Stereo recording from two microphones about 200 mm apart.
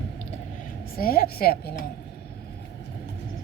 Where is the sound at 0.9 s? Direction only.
50° left (ahead or behind).